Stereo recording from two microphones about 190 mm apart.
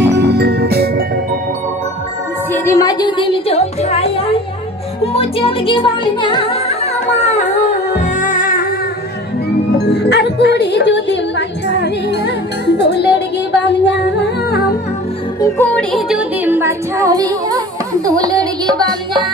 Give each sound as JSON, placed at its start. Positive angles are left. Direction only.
{"t": 0.0, "sound": "music", "side_deg": -65}
{"t": 2.5, "sound": "speech", "side_deg": 15}
{"t": 5.0, "sound": "music", "side_deg": 30}
{"t": 9.8, "sound": "speech", "side_deg": 60}
{"t": 12.6, "sound": "music", "side_deg": 65}
{"t": 15.4, "sound": "music", "side_deg": 10}
{"t": 16.1, "sound": "music", "side_deg": -10}